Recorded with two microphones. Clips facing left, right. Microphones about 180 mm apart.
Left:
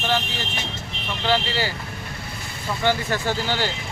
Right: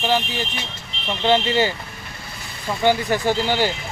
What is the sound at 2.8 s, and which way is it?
Speech, 15° right (ahead or behind).